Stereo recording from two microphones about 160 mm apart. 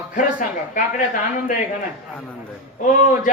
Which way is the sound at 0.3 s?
55° left (ahead or behind).